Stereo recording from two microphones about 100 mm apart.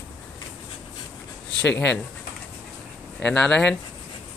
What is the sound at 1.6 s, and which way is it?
Speech, 10° left (ahead or behind).